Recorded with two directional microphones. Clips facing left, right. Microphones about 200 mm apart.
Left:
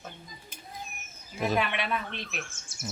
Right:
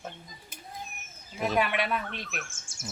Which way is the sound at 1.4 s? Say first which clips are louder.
Right 1 dB; 5° right (ahead or behind).